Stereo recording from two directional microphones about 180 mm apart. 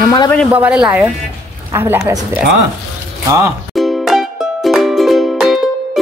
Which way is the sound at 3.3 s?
15° right (ahead or behind).